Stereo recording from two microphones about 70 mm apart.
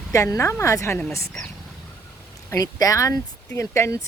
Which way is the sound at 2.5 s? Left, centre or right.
Left.